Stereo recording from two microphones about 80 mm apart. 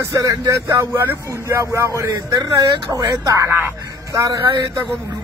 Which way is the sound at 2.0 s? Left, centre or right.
Right.